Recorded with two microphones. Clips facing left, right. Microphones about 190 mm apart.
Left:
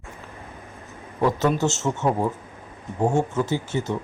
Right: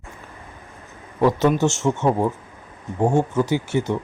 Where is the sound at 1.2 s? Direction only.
15° right (ahead or behind).